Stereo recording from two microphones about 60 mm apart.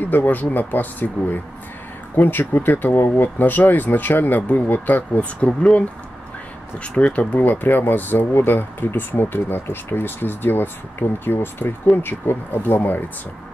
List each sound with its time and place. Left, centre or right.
0.0 s speech: left